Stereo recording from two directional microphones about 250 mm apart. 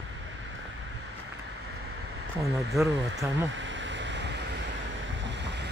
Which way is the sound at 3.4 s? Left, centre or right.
Right.